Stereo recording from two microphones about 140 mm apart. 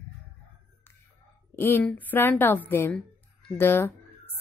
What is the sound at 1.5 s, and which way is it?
A woman's voice, 15° left (ahead or behind).